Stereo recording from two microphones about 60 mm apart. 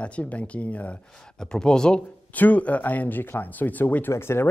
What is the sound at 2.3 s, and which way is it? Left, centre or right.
Speech, left.